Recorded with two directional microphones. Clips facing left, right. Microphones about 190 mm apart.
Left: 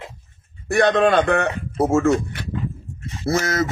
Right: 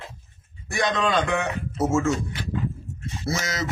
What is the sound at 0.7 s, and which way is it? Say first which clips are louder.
Speech: left 8 dB; 60° left (ahead or behind).